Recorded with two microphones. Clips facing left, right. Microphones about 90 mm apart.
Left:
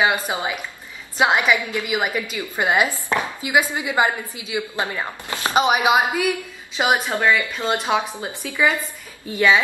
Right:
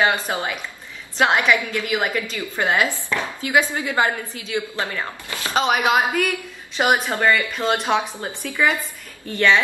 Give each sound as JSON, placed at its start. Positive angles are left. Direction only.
{"t": 0.0, "sound": "a woman's voice", "side_deg": 10}